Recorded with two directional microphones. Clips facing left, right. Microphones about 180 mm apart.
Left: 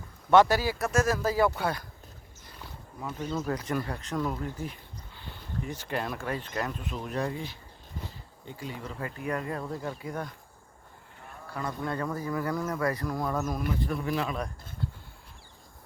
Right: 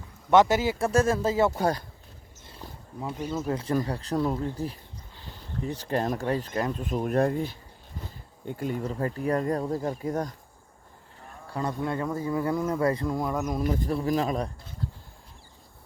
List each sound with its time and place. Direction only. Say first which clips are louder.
0.3 s speech: right 1 dB; 20° right (ahead or behind)
1.5 s speech: right 5 dB; 40° right (ahead or behind)
2.5 s a sound: right 3 dB; 30° right (ahead or behind)
3.2 s speech: right 1 dB; 10° right (ahead or behind)
3.4 s speech: right 7 dB; 25° right (ahead or behind)
6.8 s speech: right 8 dB; 45° right (ahead or behind); by 13.6 s 15° right (ahead or behind)
13.7 s speech: right 4 dB; 40° right (ahead or behind)